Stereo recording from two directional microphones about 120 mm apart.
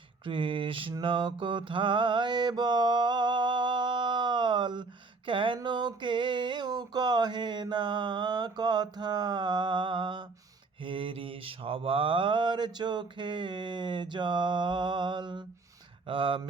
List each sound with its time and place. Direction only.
0.3 s mantra: 45° right (ahead or behind)
5.5 s a sound: 40° right (ahead or behind)
16.0 s mantra: 45° right (ahead or behind)